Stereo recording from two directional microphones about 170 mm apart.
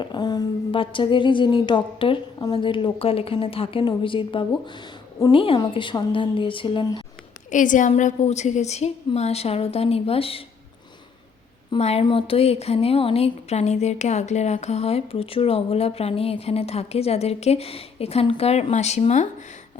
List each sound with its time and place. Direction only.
0.0 s a woman's voice: 25° left (ahead or behind)
7.5 s speech: 50° left (ahead or behind); by 10.4 s 35° left (ahead or behind)
11.8 s speech: 40° left (ahead or behind)